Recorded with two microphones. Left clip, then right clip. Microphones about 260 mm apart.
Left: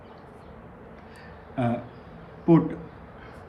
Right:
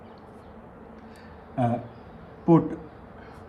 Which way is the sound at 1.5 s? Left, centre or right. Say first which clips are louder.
Right 1 dB; centre.